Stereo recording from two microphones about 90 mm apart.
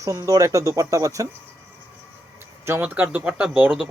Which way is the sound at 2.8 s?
20° right (ahead or behind).